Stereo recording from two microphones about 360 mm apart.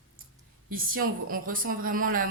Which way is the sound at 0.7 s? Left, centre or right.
Right.